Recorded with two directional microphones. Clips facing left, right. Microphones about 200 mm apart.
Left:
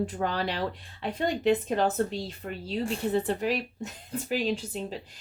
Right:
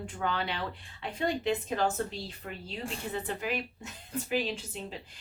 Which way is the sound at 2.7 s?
35° left (ahead or behind).